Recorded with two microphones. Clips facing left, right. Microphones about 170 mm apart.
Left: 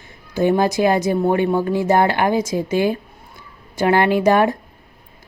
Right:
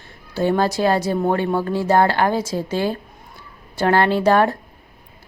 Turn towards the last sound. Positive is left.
turn(degrees=15)  # may be behind; listen again after turning